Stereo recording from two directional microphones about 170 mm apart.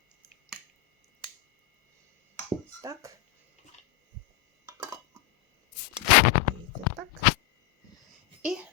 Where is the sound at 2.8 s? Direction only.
15° right (ahead or behind).